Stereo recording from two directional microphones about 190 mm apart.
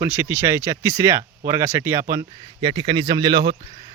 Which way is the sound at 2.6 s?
25° right (ahead or behind).